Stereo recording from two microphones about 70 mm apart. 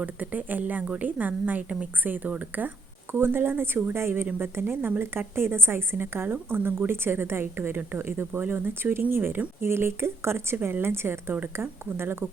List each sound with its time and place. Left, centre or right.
0.0 s a woman's voice: right